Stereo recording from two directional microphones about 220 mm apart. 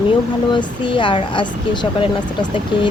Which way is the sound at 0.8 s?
20° left (ahead or behind).